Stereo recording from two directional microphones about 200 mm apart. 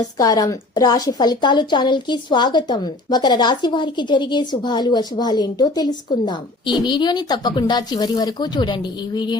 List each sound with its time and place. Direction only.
0.2 s a woman's voice: 20° left (ahead or behind)